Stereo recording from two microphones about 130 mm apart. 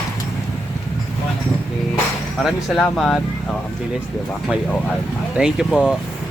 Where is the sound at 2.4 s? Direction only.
Centre (ahead or behind).